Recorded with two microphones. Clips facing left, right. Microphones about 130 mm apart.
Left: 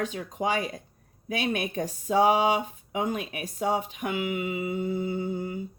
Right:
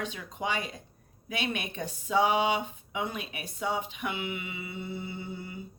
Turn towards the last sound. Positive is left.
turn(degrees=45)  # may be behind; listen again after turning